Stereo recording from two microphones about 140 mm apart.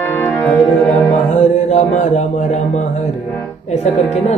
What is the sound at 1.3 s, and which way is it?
A man's voice, 60° left (ahead or behind).